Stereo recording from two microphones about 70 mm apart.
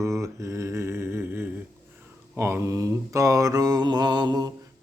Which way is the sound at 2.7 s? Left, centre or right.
Right.